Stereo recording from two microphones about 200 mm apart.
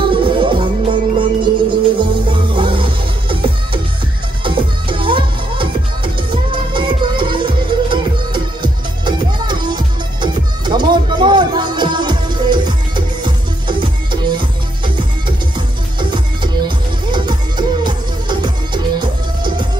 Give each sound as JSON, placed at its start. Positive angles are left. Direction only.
{"t": 0.0, "sound": "music", "side_deg": -25}
{"t": 16.6, "sound": "music", "side_deg": -20}